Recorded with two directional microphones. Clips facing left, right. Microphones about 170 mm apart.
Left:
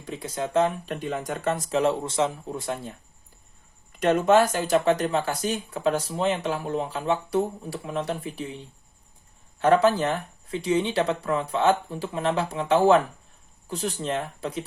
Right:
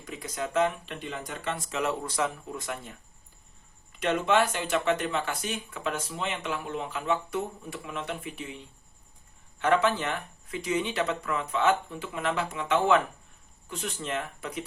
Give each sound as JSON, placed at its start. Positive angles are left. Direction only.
{"t": 0.0, "sound": "speech", "side_deg": 30}
{"t": 4.0, "sound": "speech", "side_deg": 40}